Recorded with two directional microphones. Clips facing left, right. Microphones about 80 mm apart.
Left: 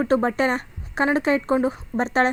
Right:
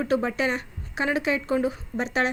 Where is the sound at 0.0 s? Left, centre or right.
Left.